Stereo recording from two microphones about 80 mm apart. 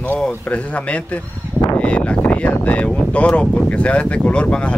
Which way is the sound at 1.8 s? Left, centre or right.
Centre.